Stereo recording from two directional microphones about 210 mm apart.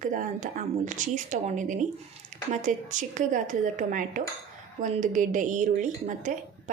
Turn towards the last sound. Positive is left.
turn(degrees=-35)  # may be behind; listen again after turning